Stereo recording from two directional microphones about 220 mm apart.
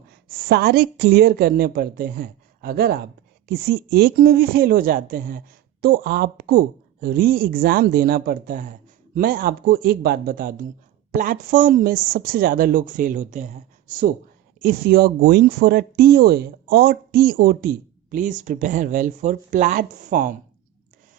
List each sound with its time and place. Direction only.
0.3 s a woman's voice: 45° right (ahead or behind)